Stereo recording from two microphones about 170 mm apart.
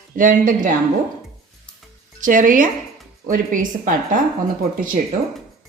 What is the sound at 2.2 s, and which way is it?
A woman's voice, 50° right (ahead or behind).